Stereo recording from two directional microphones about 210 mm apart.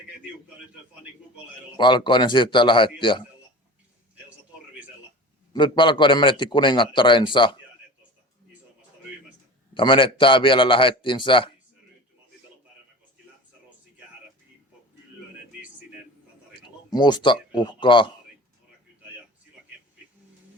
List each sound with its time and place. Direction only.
1.7 s a man's voice: 20° left (ahead or behind)
5.5 s a man's voice: 20° left (ahead or behind)
9.7 s a man's voice: 25° left (ahead or behind)
16.6 s speech: 20° left (ahead or behind)
19.7 s a sound: centre (ahead or behind)